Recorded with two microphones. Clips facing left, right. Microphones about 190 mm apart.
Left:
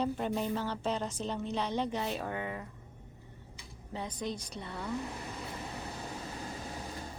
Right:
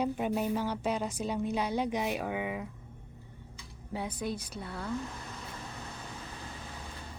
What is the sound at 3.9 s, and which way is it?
A woman's voice, 10° right (ahead or behind).